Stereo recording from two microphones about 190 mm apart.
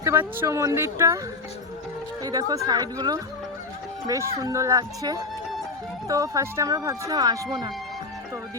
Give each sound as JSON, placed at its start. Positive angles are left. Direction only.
{"t": 0.0, "sound": "speech", "side_deg": -15}
{"t": 2.5, "sound": "speech", "side_deg": -20}